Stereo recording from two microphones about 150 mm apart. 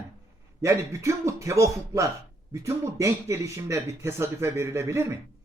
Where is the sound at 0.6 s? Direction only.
20° right (ahead or behind).